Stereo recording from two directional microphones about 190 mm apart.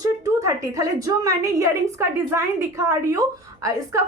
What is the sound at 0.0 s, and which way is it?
A woman's voice, 20° right (ahead or behind).